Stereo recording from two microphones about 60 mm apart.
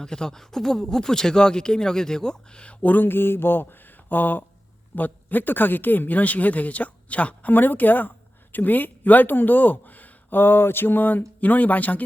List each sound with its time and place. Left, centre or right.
0.0 s speech: centre; by 12.0 s left